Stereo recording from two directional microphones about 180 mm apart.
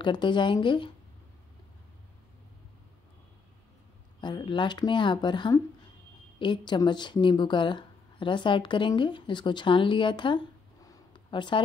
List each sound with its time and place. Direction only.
0.0 s a woman's voice: 25° left (ahead or behind)
4.2 s a woman's voice: 25° left (ahead or behind)
10.9 s a sound: 25° left (ahead or behind)